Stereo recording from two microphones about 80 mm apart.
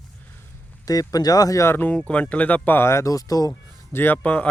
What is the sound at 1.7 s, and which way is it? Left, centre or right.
Speech, left.